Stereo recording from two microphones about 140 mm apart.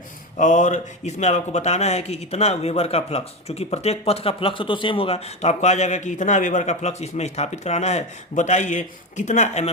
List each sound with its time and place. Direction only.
0.3 s speech: 60° left (ahead or behind)